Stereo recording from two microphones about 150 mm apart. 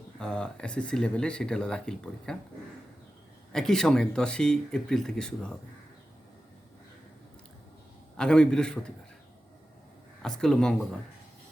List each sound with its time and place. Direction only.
0.2 s speech: 5° left (ahead or behind)
3.5 s speech: 5° left (ahead or behind)
8.1 s speech: 5° left (ahead or behind)
10.2 s speech: 5° left (ahead or behind)